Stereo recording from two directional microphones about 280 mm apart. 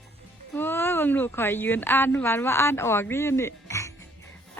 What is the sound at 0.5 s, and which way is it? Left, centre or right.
Speech, centre.